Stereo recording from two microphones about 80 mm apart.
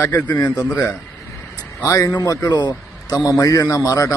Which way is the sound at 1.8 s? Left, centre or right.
Left.